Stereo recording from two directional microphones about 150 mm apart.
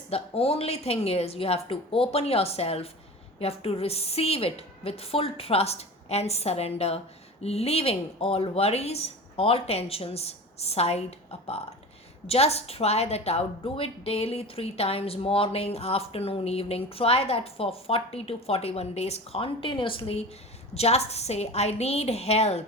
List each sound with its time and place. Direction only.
0.1 s a woman's voice: 40° left (ahead or behind)